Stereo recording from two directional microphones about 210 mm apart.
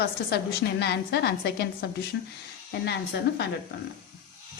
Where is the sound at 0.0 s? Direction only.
50° left (ahead or behind).